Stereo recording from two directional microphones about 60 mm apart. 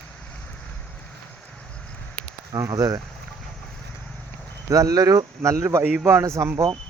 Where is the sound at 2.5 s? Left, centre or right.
Right.